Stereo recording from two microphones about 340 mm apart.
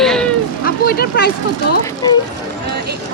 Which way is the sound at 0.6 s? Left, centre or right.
Left.